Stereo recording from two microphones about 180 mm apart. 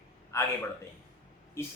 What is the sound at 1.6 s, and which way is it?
Speech, 15° left (ahead or behind).